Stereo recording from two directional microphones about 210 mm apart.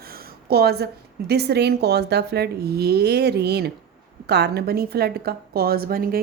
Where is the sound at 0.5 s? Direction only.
50° right (ahead or behind).